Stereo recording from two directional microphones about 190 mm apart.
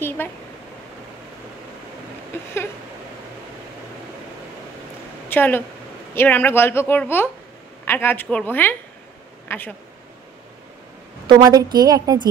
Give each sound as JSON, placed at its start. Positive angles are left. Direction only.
{"t": 0.2, "sound": "a woman's voice", "side_deg": 10}
{"t": 5.3, "sound": "a woman's voice", "side_deg": 10}
{"t": 11.2, "sound": "a woman's voice", "side_deg": -20}